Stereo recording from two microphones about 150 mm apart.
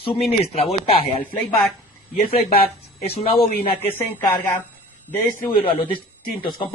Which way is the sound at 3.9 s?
15° left (ahead or behind).